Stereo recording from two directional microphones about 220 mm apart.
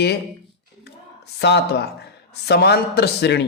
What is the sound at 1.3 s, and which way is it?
Speech, 50° left (ahead or behind).